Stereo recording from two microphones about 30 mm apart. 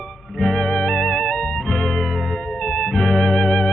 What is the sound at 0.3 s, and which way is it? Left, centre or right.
Music, centre.